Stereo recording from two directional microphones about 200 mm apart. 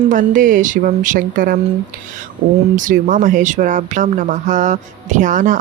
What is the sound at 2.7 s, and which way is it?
Speech, 40° right (ahead or behind).